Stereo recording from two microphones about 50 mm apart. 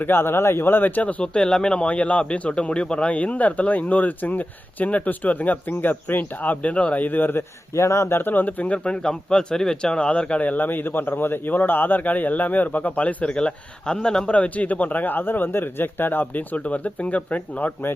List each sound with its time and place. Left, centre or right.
0.0 s speech: left
1.2 s speech: centre; by 7.4 s left
7.7 s speech: left
8.8 s a man's voice: centre
10.4 s speech: left
13.3 s a man's voice: centre
14.3 s speech: left